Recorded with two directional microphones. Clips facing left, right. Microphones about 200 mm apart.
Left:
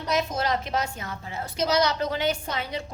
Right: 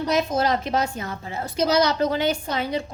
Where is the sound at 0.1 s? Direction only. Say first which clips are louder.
Right 3 dB; 35° right (ahead or behind).